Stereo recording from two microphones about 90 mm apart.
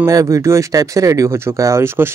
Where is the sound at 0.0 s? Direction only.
40° right (ahead or behind).